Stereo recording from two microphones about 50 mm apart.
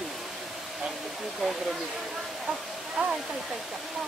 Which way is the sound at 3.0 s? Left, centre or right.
Right.